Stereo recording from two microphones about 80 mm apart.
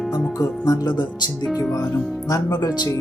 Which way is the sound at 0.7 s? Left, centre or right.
Left.